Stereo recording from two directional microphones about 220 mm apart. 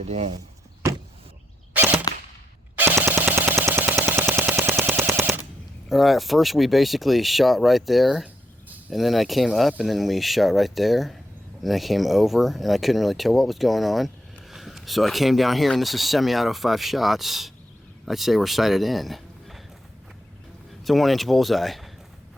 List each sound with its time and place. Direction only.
0.1 s speech: 30° right (ahead or behind)
1.7 s cap gun: 10° right (ahead or behind)
2.7 s machine gun: 10° right (ahead or behind)
5.9 s speech: centre (ahead or behind)
20.8 s speech: centre (ahead or behind)